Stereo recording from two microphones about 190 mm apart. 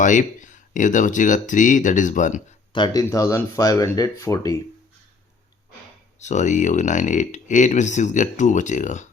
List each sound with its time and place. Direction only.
0.0 s speech: 40° left (ahead or behind)
2.7 s speech: 20° left (ahead or behind)
6.1 s speech: 40° left (ahead or behind)